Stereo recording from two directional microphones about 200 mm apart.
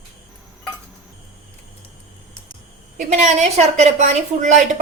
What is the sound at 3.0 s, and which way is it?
A woman's voice, 35° right (ahead or behind).